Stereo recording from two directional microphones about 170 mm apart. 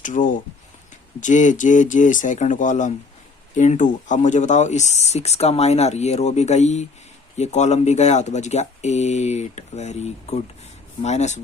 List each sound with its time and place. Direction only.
0.0 s speech: 50° left (ahead or behind)